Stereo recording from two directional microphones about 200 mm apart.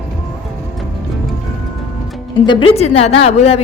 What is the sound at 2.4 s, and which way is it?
A woman's voice, 30° left (ahead or behind).